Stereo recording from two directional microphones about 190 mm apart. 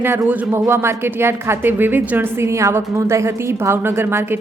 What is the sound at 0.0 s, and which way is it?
A woman's voice, 10° right (ahead or behind).